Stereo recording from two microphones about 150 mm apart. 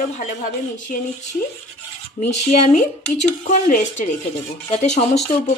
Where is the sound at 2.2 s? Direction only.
45° left (ahead or behind).